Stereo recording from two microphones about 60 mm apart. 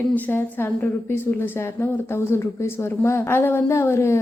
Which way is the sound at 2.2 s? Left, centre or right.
Left.